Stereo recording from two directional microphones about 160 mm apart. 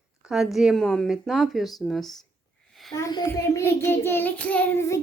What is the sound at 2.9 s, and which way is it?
Child singing, 25° left (ahead or behind).